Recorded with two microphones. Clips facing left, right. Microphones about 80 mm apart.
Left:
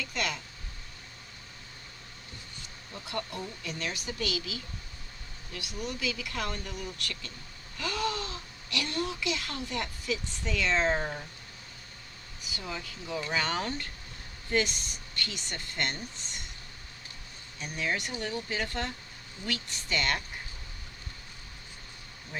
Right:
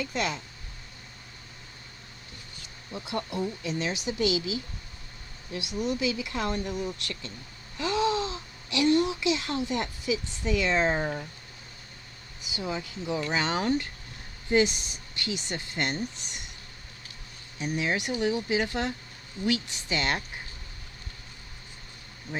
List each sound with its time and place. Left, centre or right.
0.0 s speech: right
2.9 s speech: centre
12.5 s speech: centre
17.6 s speech: centre